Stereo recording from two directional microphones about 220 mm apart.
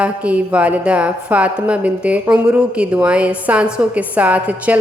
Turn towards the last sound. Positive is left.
turn(degrees=-5)  # may be behind; listen again after turning